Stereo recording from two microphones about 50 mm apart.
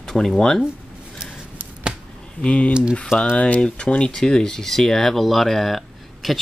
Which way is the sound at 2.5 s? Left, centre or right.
Left.